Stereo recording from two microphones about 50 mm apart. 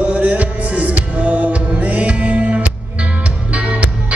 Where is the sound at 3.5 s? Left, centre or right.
Right.